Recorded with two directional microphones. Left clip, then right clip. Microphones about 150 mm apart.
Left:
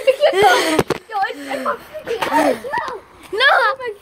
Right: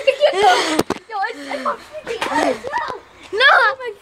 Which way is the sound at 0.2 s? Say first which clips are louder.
Even; 20° left (ahead or behind).